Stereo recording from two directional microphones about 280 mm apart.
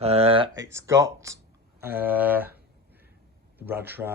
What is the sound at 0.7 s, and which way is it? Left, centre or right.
Speech, centre.